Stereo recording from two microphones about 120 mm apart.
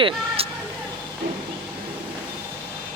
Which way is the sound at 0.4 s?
55° right (ahead or behind).